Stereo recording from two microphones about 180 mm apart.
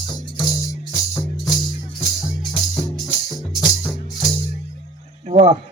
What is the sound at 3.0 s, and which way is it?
Music, centre (ahead or behind).